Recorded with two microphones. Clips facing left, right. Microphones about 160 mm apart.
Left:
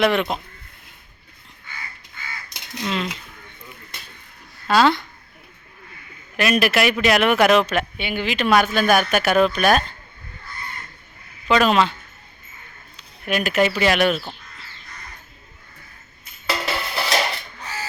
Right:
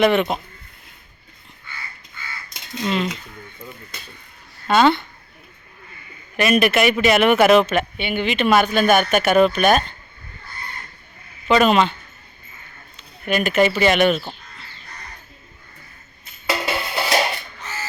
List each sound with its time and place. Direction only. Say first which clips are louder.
0.0 s speech: right 3 dB; centre (ahead or behind)
2.8 s speech: right 3 dB; centre (ahead or behind)
4.7 s speech: right 1 dB; centre (ahead or behind)
6.3 s speech: right 2 dB; centre (ahead or behind)
11.4 s speech: right 2 dB; centre (ahead or behind)
13.0 s speech: right 2 dB; centre (ahead or behind)
16.5 s music: right 2 dB; 15° right (ahead or behind)